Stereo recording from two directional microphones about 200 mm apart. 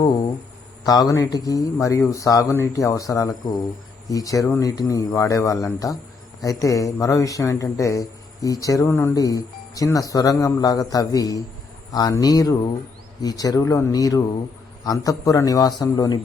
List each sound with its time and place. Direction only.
0.9 s a man's voice: 15° left (ahead or behind)